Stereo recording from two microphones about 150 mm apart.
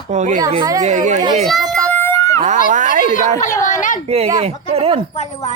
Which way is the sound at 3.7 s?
60° left (ahead or behind).